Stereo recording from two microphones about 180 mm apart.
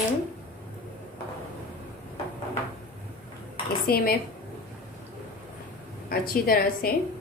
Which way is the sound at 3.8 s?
55° left (ahead or behind).